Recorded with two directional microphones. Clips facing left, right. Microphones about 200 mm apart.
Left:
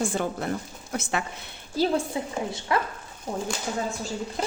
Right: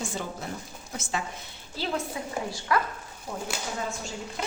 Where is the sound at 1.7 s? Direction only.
40° left (ahead or behind).